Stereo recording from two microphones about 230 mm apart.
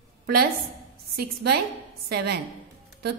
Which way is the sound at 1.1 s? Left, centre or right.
Right.